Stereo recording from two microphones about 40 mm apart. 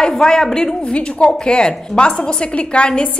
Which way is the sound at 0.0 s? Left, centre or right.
Centre.